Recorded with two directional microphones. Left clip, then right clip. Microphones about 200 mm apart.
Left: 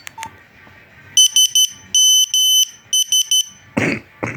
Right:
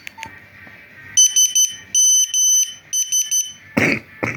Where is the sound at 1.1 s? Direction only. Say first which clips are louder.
Left 3 dB; 30° left (ahead or behind).